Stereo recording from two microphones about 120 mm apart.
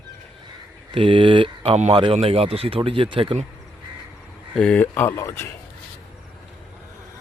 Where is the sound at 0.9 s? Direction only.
45° right (ahead or behind).